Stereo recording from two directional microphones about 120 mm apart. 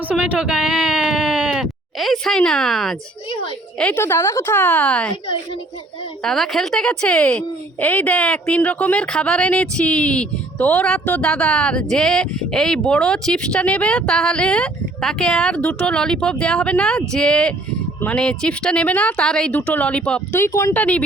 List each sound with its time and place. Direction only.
0.1 s speech: 10° right (ahead or behind)
3.9 s a woman's voice: 20° left (ahead or behind)
6.2 s a woman's voice: centre (ahead or behind)
20.3 s a woman's voice: 20° left (ahead or behind)
20.7 s a woman's voice: 10° left (ahead or behind)